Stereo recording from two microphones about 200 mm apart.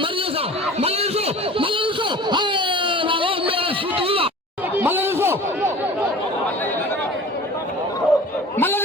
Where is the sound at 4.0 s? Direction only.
25° right (ahead or behind).